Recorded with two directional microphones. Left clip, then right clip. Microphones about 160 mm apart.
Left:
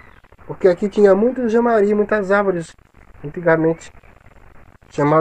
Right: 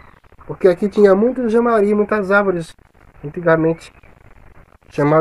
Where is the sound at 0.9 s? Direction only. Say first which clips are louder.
Right 1 dB; 25° right (ahead or behind).